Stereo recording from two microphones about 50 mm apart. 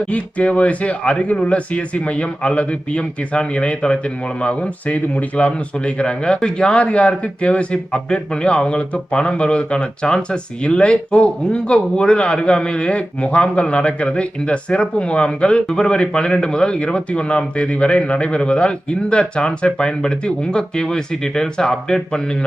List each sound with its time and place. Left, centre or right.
0.0 s speech: left